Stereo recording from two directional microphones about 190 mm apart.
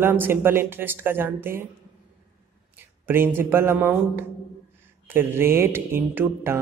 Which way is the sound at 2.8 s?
10° right (ahead or behind).